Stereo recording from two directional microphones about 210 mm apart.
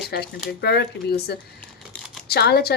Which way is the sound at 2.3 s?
50° left (ahead or behind).